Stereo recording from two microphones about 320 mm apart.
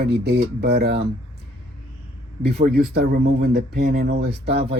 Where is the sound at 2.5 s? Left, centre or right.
Right.